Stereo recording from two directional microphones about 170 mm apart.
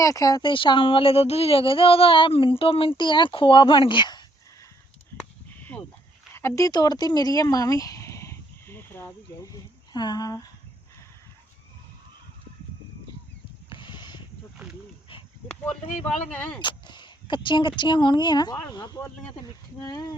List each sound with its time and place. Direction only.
0.0 s a child's voice: 20° left (ahead or behind)
5.5 s a sound: 10° left (ahead or behind)
6.3 s speech: 15° left (ahead or behind)
13.7 s a sound: 30° left (ahead or behind)
16.0 s speech: 10° left (ahead or behind)
16.6 s a child's voice: 25° left (ahead or behind)